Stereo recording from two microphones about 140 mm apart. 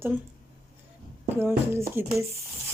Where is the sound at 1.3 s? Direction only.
15° right (ahead or behind).